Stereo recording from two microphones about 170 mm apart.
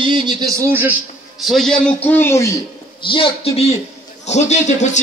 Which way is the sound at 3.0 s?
30° left (ahead or behind).